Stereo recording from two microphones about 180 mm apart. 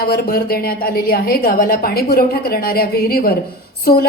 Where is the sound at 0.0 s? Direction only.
55° left (ahead or behind).